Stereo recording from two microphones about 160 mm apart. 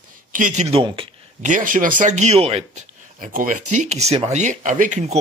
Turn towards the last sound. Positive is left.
turn(degrees=-45)  # may be behind; listen again after turning